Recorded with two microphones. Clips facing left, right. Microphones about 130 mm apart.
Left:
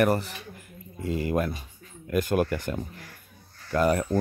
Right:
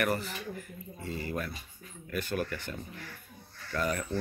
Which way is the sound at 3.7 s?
40° left (ahead or behind).